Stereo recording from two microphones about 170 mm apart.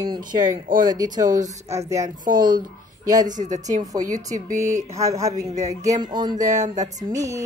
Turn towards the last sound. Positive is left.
turn(degrees=-20)  # may be behind; listen again after turning